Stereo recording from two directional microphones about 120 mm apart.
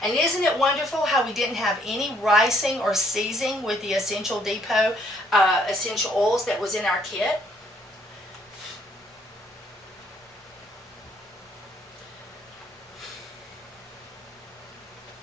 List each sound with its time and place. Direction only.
0.0 s a woman's voice: centre (ahead or behind)